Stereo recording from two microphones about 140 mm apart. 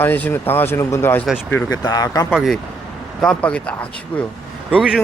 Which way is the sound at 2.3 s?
Centre (ahead or behind).